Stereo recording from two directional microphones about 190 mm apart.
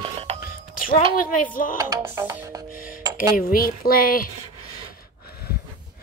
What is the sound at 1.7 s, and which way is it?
Music, 20° right (ahead or behind).